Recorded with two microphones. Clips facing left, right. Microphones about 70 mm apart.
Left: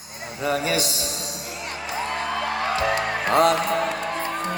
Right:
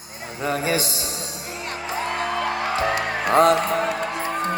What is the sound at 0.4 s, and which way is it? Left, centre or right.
Speech, right.